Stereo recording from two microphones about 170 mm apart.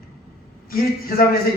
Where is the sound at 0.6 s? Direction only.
60° left (ahead or behind).